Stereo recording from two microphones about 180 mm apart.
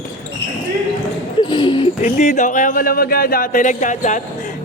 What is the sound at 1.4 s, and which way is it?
Basketball bounce, 25° left (ahead or behind).